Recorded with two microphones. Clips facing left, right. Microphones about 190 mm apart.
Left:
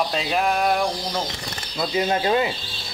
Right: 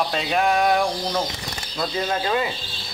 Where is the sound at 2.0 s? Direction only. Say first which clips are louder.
Left 3 dB; 20° left (ahead or behind).